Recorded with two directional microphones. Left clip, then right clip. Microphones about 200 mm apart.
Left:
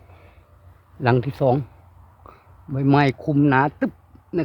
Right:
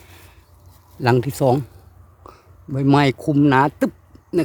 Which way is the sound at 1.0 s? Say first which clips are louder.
Right 2 dB; 10° right (ahead or behind).